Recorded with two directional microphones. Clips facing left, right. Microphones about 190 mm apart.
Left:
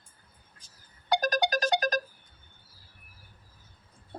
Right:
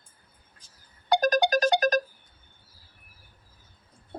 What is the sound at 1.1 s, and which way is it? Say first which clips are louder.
Music: right 5 dB; 50° right (ahead or behind).